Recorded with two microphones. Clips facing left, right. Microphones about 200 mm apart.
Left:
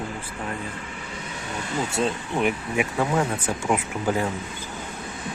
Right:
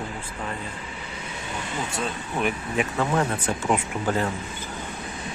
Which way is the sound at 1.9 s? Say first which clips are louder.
Left 6 dB; 20° left (ahead or behind).